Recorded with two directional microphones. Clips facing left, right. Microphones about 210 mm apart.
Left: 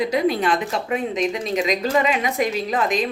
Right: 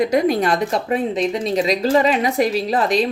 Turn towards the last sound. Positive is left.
turn(degrees=-35)  # may be behind; listen again after turning